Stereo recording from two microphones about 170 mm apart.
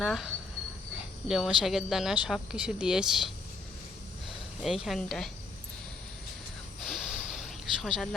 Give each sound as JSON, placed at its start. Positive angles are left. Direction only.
{"t": 0.0, "sound": "speech", "side_deg": 0}
{"t": 4.6, "sound": "speech", "side_deg": 0}
{"t": 6.8, "sound": "snort", "side_deg": 0}
{"t": 7.3, "sound": "cricket", "side_deg": 0}